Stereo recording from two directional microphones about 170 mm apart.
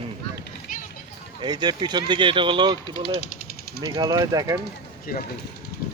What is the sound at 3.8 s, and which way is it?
Speech, 20° right (ahead or behind).